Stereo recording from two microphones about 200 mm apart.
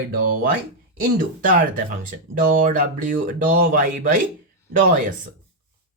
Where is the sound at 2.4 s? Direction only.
45° right (ahead or behind).